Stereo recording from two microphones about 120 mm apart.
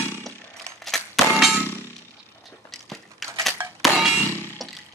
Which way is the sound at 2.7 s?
Centre (ahead or behind).